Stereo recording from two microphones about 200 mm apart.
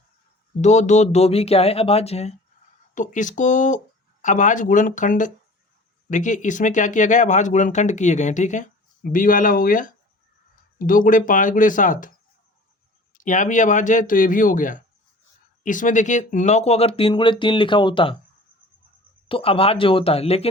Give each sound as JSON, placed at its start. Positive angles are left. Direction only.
{"t": 0.6, "sound": "speech", "side_deg": 35}
{"t": 13.2, "sound": "speech", "side_deg": 40}
{"t": 19.3, "sound": "speech", "side_deg": 30}